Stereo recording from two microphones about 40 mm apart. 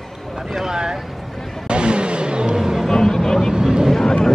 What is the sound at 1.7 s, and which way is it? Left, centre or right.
Vehicle, right.